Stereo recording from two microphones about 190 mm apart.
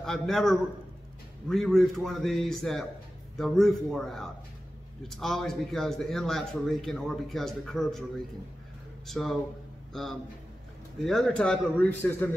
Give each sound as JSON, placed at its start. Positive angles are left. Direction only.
{"t": 0.0, "sound": "a man's voice", "side_deg": 0}
{"t": 9.0, "sound": "a man's voice", "side_deg": 0}
{"t": 11.0, "sound": "a man's voice", "side_deg": 0}